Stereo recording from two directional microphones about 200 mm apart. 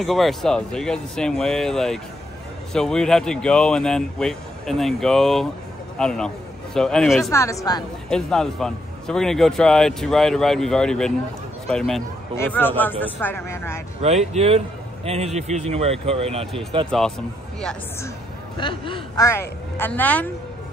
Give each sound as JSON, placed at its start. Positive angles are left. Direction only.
{"t": 0.0, "sound": "a man's voice", "side_deg": 0}
{"t": 7.2, "sound": "speech", "side_deg": 15}
{"t": 8.1, "sound": "a man's voice", "side_deg": 5}
{"t": 14.0, "sound": "speech", "side_deg": -30}
{"t": 18.6, "sound": "speech", "side_deg": 25}